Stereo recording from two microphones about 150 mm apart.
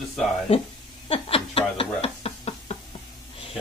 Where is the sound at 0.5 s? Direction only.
40° left (ahead or behind).